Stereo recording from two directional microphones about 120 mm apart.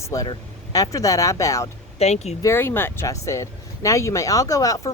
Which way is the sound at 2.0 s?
65° left (ahead or behind).